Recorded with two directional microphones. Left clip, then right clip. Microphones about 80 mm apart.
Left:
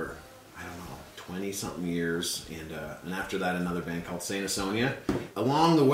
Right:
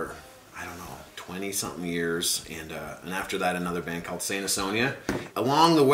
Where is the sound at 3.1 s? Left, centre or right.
Right.